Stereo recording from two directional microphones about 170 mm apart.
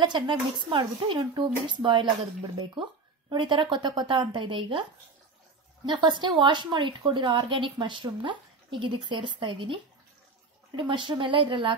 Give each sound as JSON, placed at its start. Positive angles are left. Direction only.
{"t": 0.0, "sound": "a woman's voice", "side_deg": -25}
{"t": 3.3, "sound": "a woman's voice", "side_deg": -30}
{"t": 5.9, "sound": "a woman's voice", "side_deg": -25}
{"t": 10.8, "sound": "a woman's voice", "side_deg": -30}